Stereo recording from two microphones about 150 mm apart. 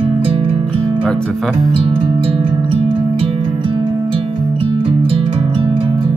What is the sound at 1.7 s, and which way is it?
Music, 35° right (ahead or behind).